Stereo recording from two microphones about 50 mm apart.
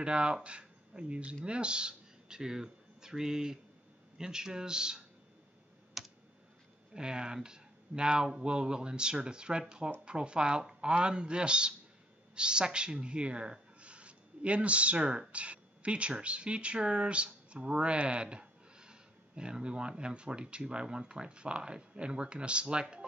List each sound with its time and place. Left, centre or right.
0.0 s speech: centre
6.0 s computer keyboard: centre
6.9 s speech: centre